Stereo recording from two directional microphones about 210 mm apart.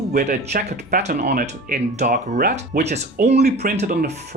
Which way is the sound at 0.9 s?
35° right (ahead or behind).